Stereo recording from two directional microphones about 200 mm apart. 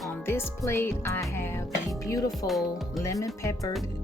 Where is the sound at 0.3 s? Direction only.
10° left (ahead or behind).